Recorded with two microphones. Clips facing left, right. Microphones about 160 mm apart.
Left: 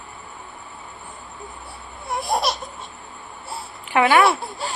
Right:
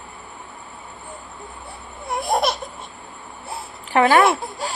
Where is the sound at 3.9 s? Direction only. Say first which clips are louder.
Right 1 dB; 40° right (ahead or behind).